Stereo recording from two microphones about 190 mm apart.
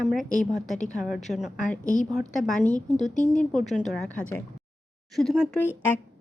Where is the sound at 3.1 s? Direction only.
40° left (ahead or behind).